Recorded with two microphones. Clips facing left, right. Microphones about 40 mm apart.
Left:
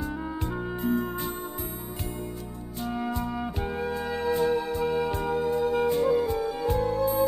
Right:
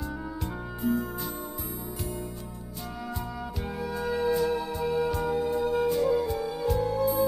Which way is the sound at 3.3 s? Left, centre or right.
Left.